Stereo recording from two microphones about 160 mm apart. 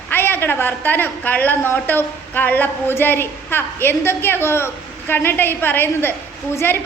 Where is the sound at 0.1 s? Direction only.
15° left (ahead or behind).